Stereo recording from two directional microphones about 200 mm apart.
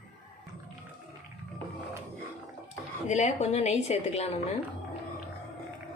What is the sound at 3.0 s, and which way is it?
A woman's voice, 35° left (ahead or behind).